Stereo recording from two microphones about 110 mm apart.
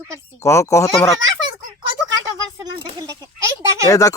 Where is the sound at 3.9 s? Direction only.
30° left (ahead or behind).